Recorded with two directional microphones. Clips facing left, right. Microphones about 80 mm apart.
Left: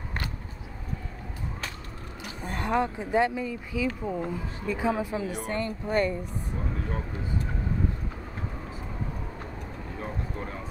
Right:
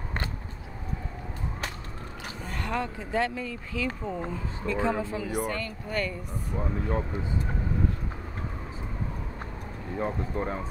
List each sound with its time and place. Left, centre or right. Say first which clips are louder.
2.4 s speech: left 5 dB; left
9.9 s speech: right 7 dB; right